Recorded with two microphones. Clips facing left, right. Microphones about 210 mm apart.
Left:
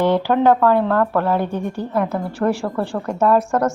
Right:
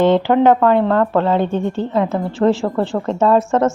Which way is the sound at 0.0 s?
20° right (ahead or behind).